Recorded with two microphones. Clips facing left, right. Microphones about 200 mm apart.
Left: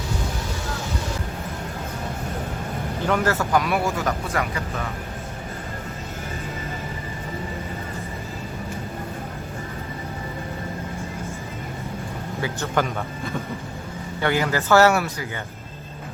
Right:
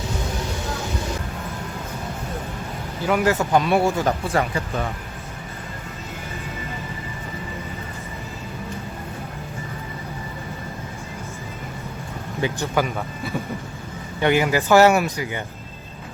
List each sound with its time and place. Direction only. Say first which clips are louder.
3.1 s speech: right 3 dB; 15° right (ahead or behind)
12.4 s speech: right 2 dB; 10° right (ahead or behind)